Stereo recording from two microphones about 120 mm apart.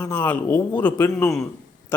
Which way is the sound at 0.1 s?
15° left (ahead or behind).